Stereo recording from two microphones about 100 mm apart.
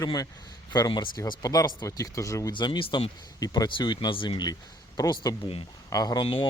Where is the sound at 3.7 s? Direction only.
50° left (ahead or behind).